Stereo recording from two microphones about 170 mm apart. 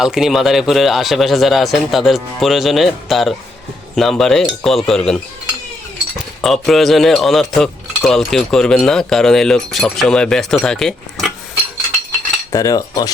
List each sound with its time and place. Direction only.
0.0 s cutlery: centre (ahead or behind)
6.4 s cutlery: centre (ahead or behind)
12.5 s cutlery: 20° left (ahead or behind)